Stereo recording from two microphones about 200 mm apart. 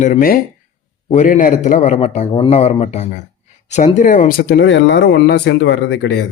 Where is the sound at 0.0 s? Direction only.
40° left (ahead or behind).